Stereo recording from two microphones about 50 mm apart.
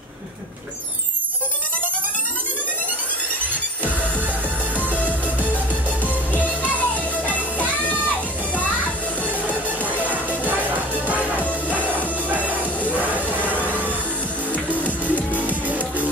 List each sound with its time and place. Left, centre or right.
4.7 s music: left
9.7 s music: right
11.3 s music: left
14.5 s music: left